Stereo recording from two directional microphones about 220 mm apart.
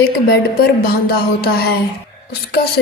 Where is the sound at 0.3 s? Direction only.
45° left (ahead or behind).